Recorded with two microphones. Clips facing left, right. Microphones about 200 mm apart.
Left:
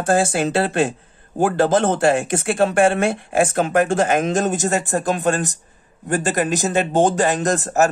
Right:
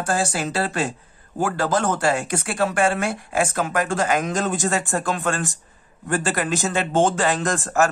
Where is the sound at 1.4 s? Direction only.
25° left (ahead or behind).